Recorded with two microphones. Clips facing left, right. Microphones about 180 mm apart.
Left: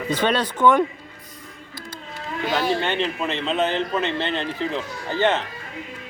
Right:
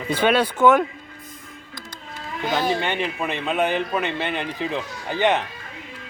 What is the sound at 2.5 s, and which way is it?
A man's voice, 15° right (ahead or behind).